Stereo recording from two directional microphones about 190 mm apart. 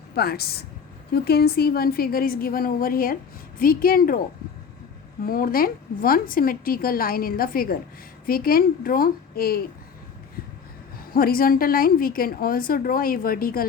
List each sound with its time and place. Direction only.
0.2 s a woman's voice: 55° left (ahead or behind)
5.2 s a woman's voice: 50° left (ahead or behind)
11.1 s a woman's voice: 50° left (ahead or behind)